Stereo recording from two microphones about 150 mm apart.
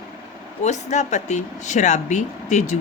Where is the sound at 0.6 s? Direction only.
50° left (ahead or behind).